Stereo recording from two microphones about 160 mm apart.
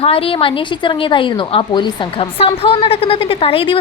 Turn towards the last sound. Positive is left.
turn(degrees=35)  # may be behind; listen again after turning